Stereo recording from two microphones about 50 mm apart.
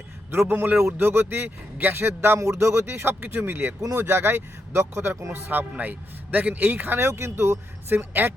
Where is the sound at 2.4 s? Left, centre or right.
Right.